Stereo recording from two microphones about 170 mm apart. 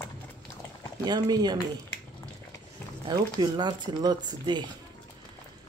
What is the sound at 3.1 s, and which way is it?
Speech, 25° right (ahead or behind).